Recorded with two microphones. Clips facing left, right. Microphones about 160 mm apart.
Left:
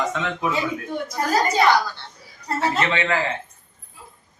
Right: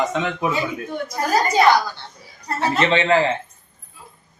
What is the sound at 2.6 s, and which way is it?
Speech, 25° right (ahead or behind).